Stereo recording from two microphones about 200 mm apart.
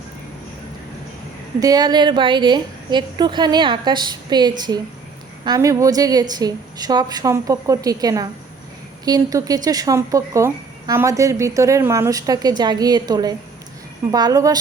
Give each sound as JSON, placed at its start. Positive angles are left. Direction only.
{"t": 1.5, "sound": "a woman's voice", "side_deg": -20}